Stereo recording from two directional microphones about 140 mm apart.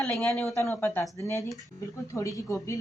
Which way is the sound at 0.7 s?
15° left (ahead or behind).